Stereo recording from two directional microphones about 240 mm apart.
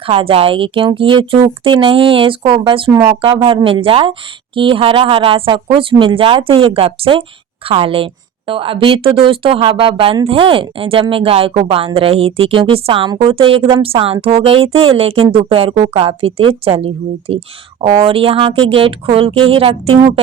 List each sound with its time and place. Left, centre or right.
0.0 s speech: right